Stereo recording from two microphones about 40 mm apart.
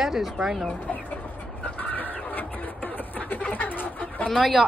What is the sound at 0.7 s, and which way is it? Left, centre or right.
Speech, left.